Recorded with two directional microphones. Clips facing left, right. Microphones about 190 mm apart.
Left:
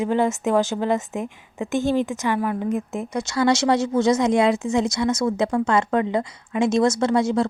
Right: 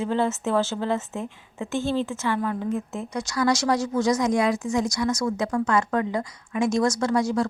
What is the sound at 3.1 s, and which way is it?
Speech, 25° left (ahead or behind).